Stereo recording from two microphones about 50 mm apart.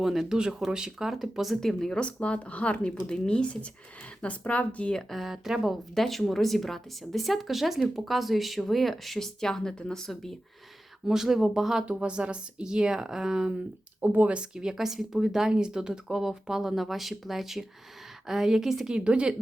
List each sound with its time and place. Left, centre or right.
0.0 s speech: centre
0.3 s speech: centre
1.6 s speech: centre
4.9 s speech: centre
11.0 s speech: centre
11.9 s speech: right
14.0 s speech: right
14.3 s speech: centre